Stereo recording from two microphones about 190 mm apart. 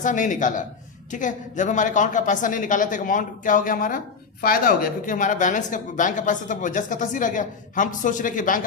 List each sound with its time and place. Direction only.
0.0 s a woman's voice: 40° left (ahead or behind)